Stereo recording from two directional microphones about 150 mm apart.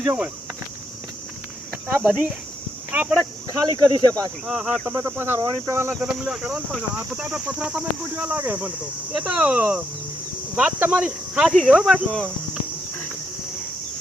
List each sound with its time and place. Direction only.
0.0 s speech: 10° right (ahead or behind)
1.9 s speech: 10° right (ahead or behind)
3.7 s speech: 30° right (ahead or behind)
4.4 s speech: centre (ahead or behind)
4.9 s speech: 15° right (ahead or behind)
5.9 s speech: 5° right (ahead or behind)